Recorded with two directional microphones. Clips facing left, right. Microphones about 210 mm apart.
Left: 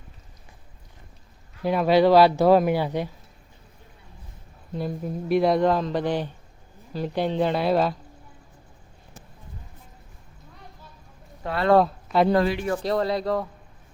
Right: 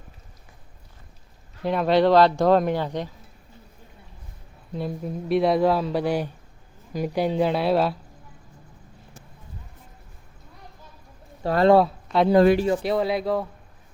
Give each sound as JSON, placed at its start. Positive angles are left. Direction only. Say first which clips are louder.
{"t": 1.6, "sound": "speech", "louder": "left 1 dB", "side_deg": 5}
{"t": 4.7, "sound": "speech", "louder": "even", "side_deg": 0}
{"t": 11.4, "sound": "speech", "louder": "right 7 dB", "side_deg": -35}
{"t": 11.7, "sound": "speech", "louder": "left 3 dB", "side_deg": 0}